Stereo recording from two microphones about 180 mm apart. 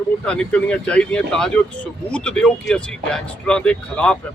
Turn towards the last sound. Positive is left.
turn(degrees=5)  # may be behind; listen again after turning